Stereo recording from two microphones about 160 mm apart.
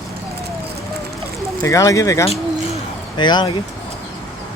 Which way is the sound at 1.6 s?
20° left (ahead or behind).